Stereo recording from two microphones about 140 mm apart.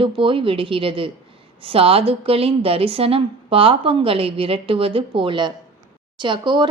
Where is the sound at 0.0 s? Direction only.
40° right (ahead or behind).